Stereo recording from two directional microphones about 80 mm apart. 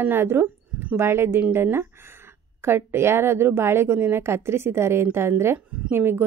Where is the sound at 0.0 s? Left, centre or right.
Right.